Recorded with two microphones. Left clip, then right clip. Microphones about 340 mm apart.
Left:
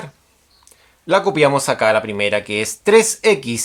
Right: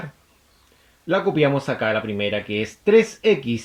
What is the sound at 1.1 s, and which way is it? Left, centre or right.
Speech, left.